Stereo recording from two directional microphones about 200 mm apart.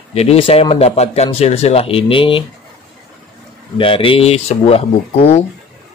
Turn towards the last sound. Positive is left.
turn(degrees=30)  # may be behind; listen again after turning